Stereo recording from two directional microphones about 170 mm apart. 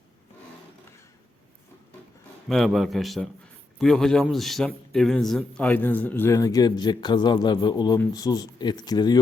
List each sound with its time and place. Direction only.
2.5 s a man's voice: centre (ahead or behind); by 9.1 s 25° left (ahead or behind)